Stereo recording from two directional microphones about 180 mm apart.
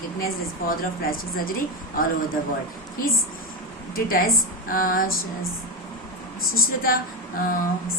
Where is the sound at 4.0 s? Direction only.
55° left (ahead or behind).